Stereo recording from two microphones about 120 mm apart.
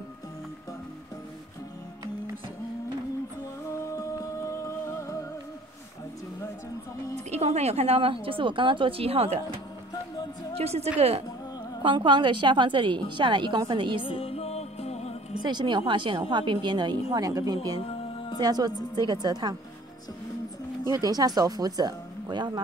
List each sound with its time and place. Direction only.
3.9 s music: 25° left (ahead or behind)
7.2 s a woman's voice: 65° right (ahead or behind)
10.6 s a woman's voice: 60° right (ahead or behind)
11.8 s a woman's voice: 45° right (ahead or behind)
14.0 s music: 50° left (ahead or behind)
15.4 s a woman's voice: 40° right (ahead or behind)
17.7 s music: 50° left (ahead or behind)
18.4 s a woman's voice: 35° right (ahead or behind)
20.9 s a woman's voice: 30° right (ahead or behind)